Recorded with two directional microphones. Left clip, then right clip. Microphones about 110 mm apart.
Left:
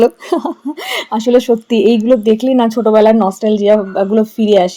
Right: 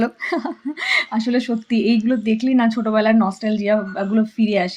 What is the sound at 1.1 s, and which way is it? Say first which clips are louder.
A woman's voice: left 11 dB; 60° left (ahead or behind).